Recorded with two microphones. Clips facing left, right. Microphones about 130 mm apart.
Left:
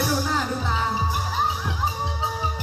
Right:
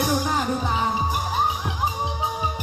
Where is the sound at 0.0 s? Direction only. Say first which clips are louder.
Right 1 dB; 15° right (ahead or behind).